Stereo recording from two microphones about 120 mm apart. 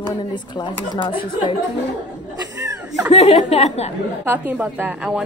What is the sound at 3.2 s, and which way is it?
Speech, 70° left (ahead or behind).